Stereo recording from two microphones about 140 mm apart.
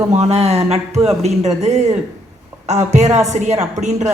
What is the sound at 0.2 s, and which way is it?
Speech, 50° right (ahead or behind).